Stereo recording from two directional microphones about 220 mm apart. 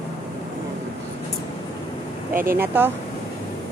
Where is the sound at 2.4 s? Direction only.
10° right (ahead or behind).